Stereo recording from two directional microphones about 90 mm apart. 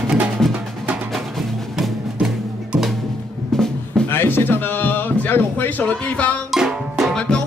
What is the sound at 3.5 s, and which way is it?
Music, 5° left (ahead or behind).